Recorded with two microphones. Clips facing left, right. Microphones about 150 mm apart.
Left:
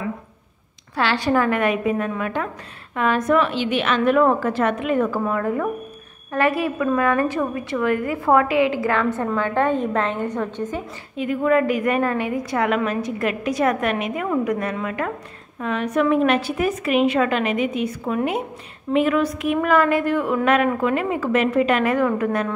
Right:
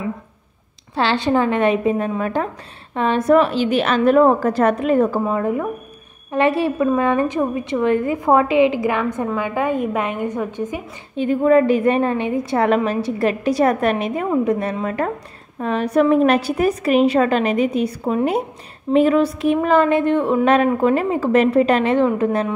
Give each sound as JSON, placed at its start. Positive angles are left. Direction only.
{"t": 0.9, "sound": "a woman's voice", "side_deg": -25}
{"t": 5.2, "sound": "a woman's voice", "side_deg": -20}
{"t": 11.1, "sound": "a woman's voice", "side_deg": -30}